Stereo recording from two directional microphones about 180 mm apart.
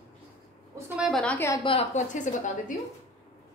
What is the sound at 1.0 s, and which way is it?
Speech, centre (ahead or behind).